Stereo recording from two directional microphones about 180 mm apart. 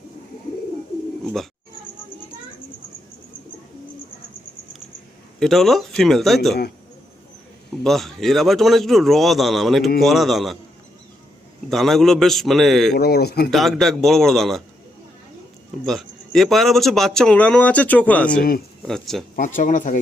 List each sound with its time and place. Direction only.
1.2 s speech: centre (ahead or behind)
5.4 s speech: centre (ahead or behind)
7.9 s speech: centre (ahead or behind)
11.7 s speech: centre (ahead or behind)
13.0 s a man's voice: 60° left (ahead or behind)
13.5 s speech: centre (ahead or behind)
15.9 s speech: centre (ahead or behind)
19.5 s speech: 45° left (ahead or behind)